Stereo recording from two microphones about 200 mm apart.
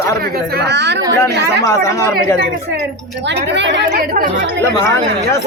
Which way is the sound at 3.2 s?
60° right (ahead or behind).